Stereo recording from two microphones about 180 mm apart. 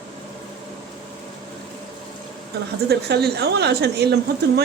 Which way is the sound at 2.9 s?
65° right (ahead or behind).